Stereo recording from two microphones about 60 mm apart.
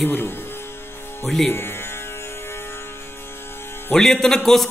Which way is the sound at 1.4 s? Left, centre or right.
Left.